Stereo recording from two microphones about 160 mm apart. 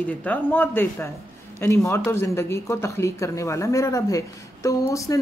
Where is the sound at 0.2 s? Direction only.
10° left (ahead or behind).